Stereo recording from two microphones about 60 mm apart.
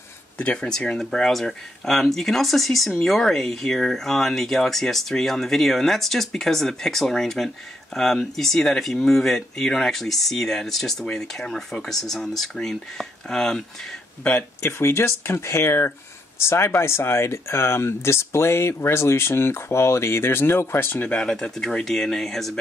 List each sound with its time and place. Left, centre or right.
0.4 s speech: left
0.9 s speech: centre
14.6 s speech: left
21.1 s speech: centre